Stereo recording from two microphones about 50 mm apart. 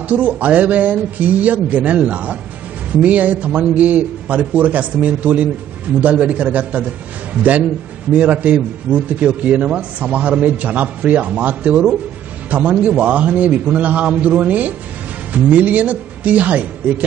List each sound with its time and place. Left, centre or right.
0.1 s speech: right
8.1 s a man's voice: right